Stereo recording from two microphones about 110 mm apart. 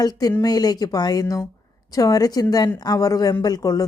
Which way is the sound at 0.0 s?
35° left (ahead or behind).